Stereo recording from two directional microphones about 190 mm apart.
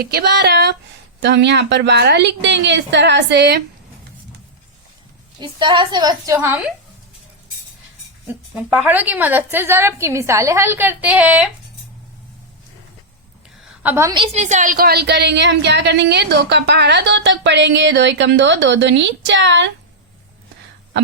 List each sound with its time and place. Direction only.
0.0 s a woman's voice: 60° right (ahead or behind)
5.4 s a woman's voice: 25° right (ahead or behind)
8.3 s a woman's voice: 5° right (ahead or behind)
13.8 s a woman's voice: 15° right (ahead or behind)
14.2 s a woman's voice: 35° right (ahead or behind); by 19.6 s 70° right (ahead or behind)